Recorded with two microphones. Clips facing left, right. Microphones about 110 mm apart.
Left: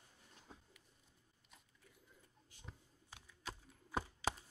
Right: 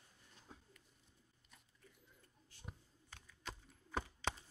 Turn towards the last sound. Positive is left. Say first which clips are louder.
# left 2 dB
turn(degrees=5)  # may be behind; listen again after turning